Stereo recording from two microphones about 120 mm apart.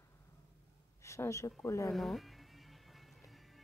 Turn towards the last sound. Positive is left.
turn(degrees=0)  # may be behind; listen again after turning